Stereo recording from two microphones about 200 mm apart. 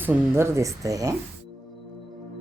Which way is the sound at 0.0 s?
10° right (ahead or behind).